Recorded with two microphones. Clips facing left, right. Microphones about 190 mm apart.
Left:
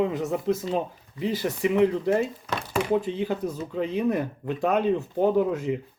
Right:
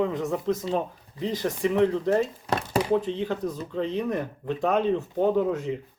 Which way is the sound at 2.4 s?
35° right (ahead or behind).